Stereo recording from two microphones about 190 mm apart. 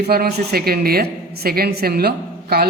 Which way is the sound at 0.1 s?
55° right (ahead or behind).